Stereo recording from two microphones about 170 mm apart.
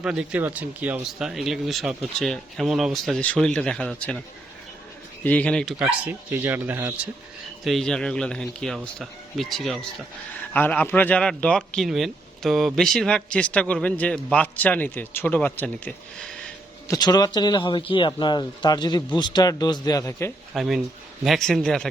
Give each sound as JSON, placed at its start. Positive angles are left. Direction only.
{"t": 0.0, "sound": "speech", "side_deg": -5}
{"t": 5.2, "sound": "speech", "side_deg": 10}
{"t": 6.1, "sound": "speech", "side_deg": -10}
{"t": 7.6, "sound": "speech", "side_deg": 0}
{"t": 16.9, "sound": "speech", "side_deg": 25}
{"t": 20.5, "sound": "speech", "side_deg": 0}